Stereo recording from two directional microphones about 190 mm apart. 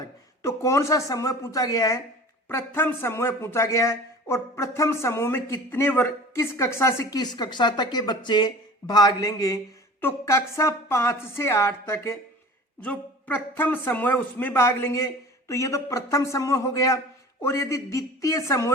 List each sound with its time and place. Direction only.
0.4 s speech: 15° left (ahead or behind)